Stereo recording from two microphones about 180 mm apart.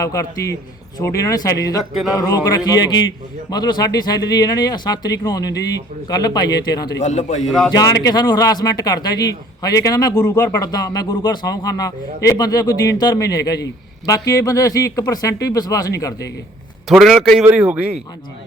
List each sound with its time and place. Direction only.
0.0 s a man's voice: 15° left (ahead or behind)
1.8 s a man's voice: centre (ahead or behind)
2.1 s a man's voice: 20° left (ahead or behind)
7.0 s a man's voice: 40° left (ahead or behind)
7.7 s a man's voice: 20° left (ahead or behind)
16.9 s a man's voice: centre (ahead or behind)
17.4 s speech: 10° right (ahead or behind)